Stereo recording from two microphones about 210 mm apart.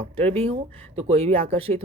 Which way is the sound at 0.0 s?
30° right (ahead or behind).